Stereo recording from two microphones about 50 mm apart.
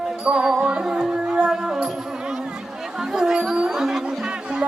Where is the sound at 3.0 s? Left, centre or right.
Centre.